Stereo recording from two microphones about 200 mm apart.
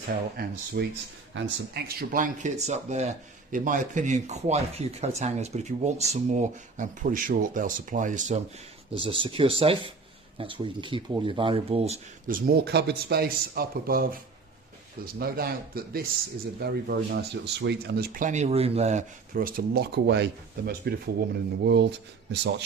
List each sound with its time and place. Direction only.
0.3 s speech: 50° right (ahead or behind)
9.0 s speech: 25° right (ahead or behind)
12.3 s speech: 50° right (ahead or behind)